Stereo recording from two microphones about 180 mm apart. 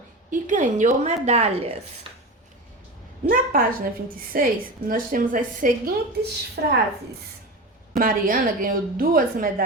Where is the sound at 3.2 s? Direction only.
50° right (ahead or behind).